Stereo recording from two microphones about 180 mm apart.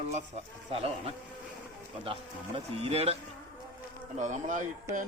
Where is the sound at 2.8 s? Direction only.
35° right (ahead or behind).